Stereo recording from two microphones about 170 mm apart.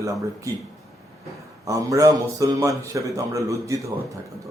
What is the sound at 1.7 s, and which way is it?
A man's voice, 20° right (ahead or behind).